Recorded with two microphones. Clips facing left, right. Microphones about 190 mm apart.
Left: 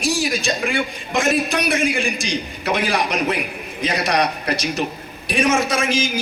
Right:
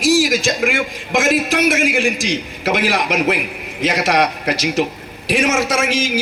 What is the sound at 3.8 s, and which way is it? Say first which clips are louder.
Speech: right 3 dB; 90° right.